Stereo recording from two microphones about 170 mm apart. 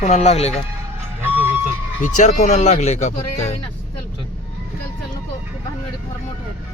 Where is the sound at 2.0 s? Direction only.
45° left (ahead or behind).